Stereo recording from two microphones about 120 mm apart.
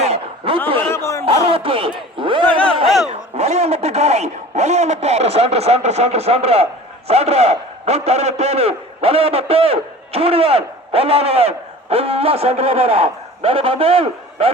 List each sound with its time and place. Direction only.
0.0 s a sound: 55° right (ahead or behind)
0.8 s chatter: 20° left (ahead or behind)
1.2 s music: 50° right (ahead or behind)
2.1 s speech: 45° right (ahead or behind)
3.1 s a man's voice: 65° right (ahead or behind)